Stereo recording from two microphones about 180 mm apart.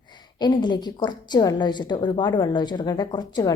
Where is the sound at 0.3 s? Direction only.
25° left (ahead or behind).